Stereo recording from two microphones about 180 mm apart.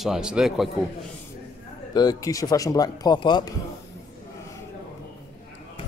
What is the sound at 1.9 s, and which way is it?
Speech, 20° left (ahead or behind).